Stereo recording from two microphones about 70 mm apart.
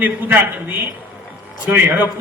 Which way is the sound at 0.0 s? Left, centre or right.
Right.